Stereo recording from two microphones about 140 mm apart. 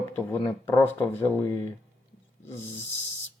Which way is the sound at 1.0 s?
15° left (ahead or behind).